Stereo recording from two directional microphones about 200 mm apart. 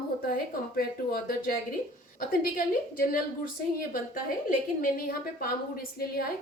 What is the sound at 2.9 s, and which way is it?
Speech, 45° left (ahead or behind).